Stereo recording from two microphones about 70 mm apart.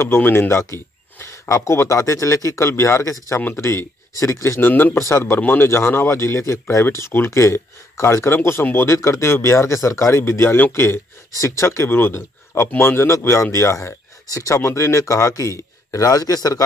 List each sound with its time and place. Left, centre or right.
0.0 s speech: left
4.6 s speech: left
4.9 s speech: left